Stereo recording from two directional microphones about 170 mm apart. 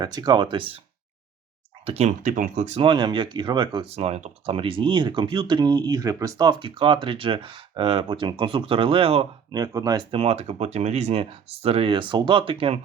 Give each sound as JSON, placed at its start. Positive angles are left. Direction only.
{"t": 0.0, "sound": "speech", "side_deg": -25}
{"t": 1.8, "sound": "speech", "side_deg": -40}
{"t": 2.8, "sound": "speech", "side_deg": -25}
{"t": 9.6, "sound": "speech", "side_deg": -20}